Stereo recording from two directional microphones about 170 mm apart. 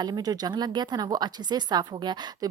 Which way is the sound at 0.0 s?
25° right (ahead or behind).